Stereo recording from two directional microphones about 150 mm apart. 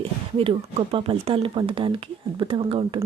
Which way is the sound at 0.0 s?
40° right (ahead or behind).